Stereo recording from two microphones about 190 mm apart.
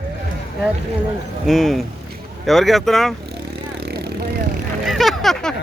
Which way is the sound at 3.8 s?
55° right (ahead or behind).